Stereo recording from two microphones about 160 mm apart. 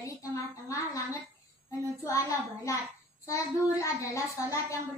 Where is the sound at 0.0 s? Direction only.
20° left (ahead or behind).